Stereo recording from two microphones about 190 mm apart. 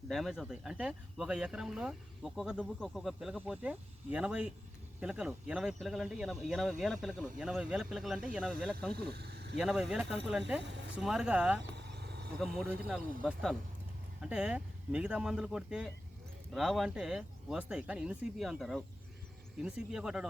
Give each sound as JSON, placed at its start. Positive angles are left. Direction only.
{"t": 0.1, "sound": "speech", "side_deg": 0}
{"t": 9.0, "sound": "speech", "side_deg": -55}
{"t": 9.6, "sound": "speech", "side_deg": 0}
{"t": 11.7, "sound": "insect", "side_deg": -65}
{"t": 12.4, "sound": "speech", "side_deg": 0}